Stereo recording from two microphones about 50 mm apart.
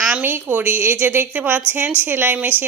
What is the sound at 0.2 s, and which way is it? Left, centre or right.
Speech, right.